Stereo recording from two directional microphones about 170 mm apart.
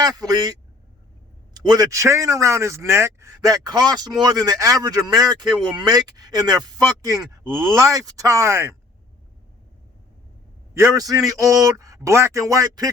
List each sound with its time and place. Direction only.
0.0 s speech: 20° right (ahead or behind)
1.5 s speech: 25° right (ahead or behind)
10.8 s speech: 20° right (ahead or behind)